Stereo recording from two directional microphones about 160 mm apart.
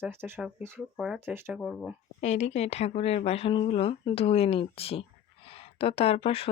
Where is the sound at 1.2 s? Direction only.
15° right (ahead or behind).